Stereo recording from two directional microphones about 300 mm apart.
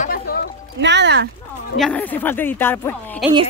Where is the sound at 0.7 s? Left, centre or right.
Right.